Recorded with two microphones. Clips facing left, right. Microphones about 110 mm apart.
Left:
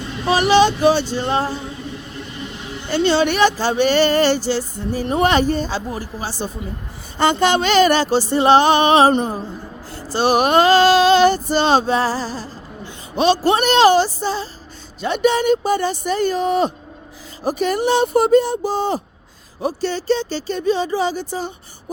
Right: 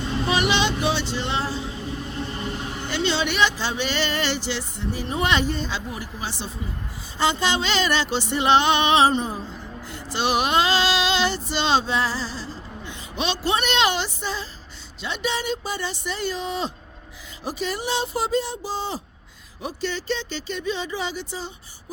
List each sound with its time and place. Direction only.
0.3 s speech: 40° left (ahead or behind)
2.9 s speech: 45° left (ahead or behind)
7.2 s speech: 55° left (ahead or behind)
9.9 s a woman's voice: 40° left (ahead or behind)
15.0 s speech: 50° left (ahead or behind)
19.6 s speech: 35° left (ahead or behind)